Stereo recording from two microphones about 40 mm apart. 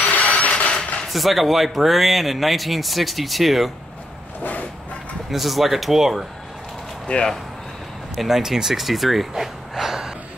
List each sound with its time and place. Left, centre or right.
0.0 s mechanisms: left
1.0 s speech: centre
4.4 s a sound: left
5.3 s speech: centre
7.1 s speech: left
8.4 s speech: centre
9.3 s a sound: centre